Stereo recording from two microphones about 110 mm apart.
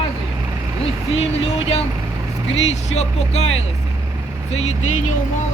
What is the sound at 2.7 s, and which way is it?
Speech, 85° left.